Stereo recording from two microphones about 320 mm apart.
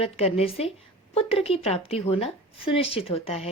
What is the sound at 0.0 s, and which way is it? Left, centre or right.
A woman's voice, centre.